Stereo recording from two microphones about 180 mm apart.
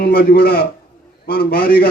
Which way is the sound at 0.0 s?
55° left (ahead or behind).